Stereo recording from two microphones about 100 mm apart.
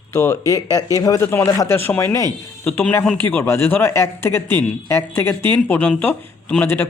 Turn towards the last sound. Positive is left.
turn(degrees=20)  # may be behind; listen again after turning